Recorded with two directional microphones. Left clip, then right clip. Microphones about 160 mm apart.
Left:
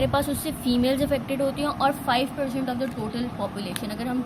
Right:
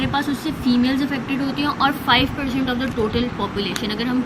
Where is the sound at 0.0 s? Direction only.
40° left (ahead or behind).